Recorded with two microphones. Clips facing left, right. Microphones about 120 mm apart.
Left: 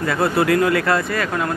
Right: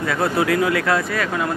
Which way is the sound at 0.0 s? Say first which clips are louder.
Left 2 dB; centre (ahead or behind).